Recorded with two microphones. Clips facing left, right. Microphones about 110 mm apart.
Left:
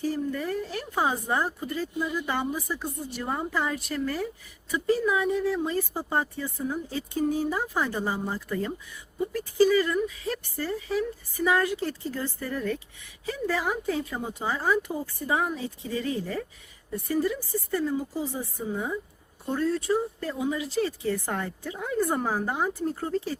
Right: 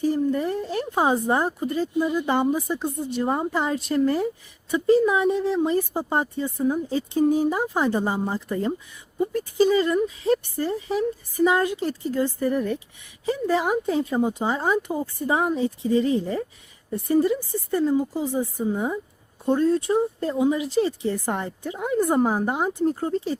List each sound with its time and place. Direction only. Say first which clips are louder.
0.0 s speech: right 6 dB; 20° right (ahead or behind)